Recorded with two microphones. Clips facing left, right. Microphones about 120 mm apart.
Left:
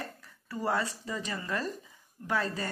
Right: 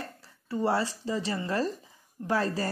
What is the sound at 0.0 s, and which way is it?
Speech, 30° right (ahead or behind).